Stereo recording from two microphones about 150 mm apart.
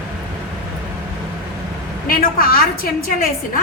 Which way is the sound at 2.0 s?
75° left (ahead or behind).